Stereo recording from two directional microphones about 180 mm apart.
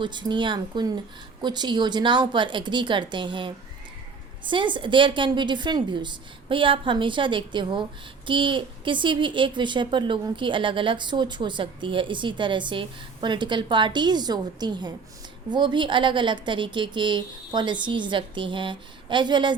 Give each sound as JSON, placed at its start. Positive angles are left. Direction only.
{"t": 0.0, "sound": "a woman's voice", "side_deg": -25}